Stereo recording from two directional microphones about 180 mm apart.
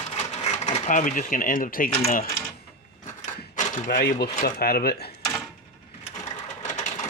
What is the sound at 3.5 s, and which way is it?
Speech, 45° left (ahead or behind).